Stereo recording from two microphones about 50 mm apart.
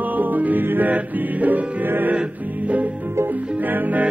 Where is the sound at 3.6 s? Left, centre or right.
Right.